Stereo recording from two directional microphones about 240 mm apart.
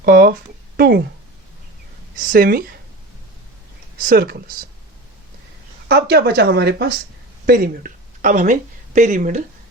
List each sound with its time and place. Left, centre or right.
0.0 s speech: right
2.1 s speech: right
3.9 s speech: right
5.9 s speech: right